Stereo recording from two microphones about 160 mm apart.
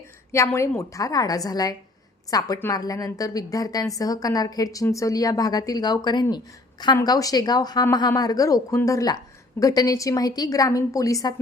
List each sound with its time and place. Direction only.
0.3 s a woman's voice: 15° left (ahead or behind)